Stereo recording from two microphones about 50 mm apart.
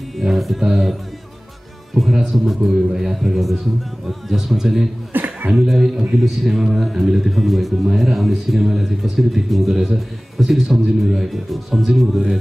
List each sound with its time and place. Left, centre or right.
0.2 s a man's voice: centre
2.3 s a man's voice: centre
5.1 s cough: right
5.5 s a man's voice: centre